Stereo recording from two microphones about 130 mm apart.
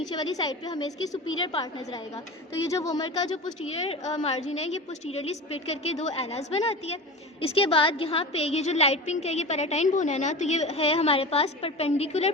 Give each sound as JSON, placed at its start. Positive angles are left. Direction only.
{"t": 0.1, "sound": "a woman's voice", "side_deg": 30}
{"t": 3.8, "sound": "a woman's voice", "side_deg": 50}